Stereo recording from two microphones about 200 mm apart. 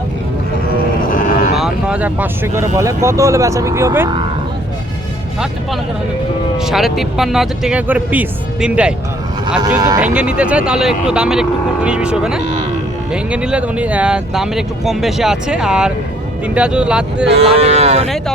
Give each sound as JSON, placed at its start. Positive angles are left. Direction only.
{"t": 1.1, "sound": "vehicle", "side_deg": 45}
{"t": 1.5, "sound": "vehicle", "side_deg": -5}
{"t": 2.6, "sound": "speech", "side_deg": -15}
{"t": 6.6, "sound": "speech", "side_deg": 0}
{"t": 9.6, "sound": "speech", "side_deg": -20}
{"t": 10.2, "sound": "speech", "side_deg": -5}
{"t": 17.3, "sound": "speech", "side_deg": -30}